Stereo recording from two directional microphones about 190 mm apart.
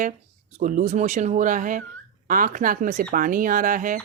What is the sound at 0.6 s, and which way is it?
A woman's voice, 40° right (ahead or behind).